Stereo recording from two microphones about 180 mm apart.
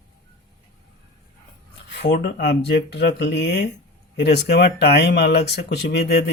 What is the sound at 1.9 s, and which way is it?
Speech, 70° left (ahead or behind).